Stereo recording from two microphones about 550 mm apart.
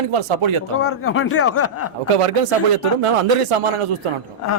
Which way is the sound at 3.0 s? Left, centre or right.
Right.